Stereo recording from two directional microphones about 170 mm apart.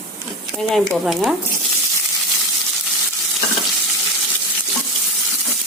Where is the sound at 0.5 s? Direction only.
Centre (ahead or behind).